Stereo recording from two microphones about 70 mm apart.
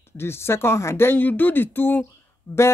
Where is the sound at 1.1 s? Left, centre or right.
Left.